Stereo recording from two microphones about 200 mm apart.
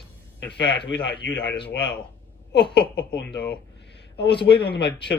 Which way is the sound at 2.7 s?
55° left (ahead or behind).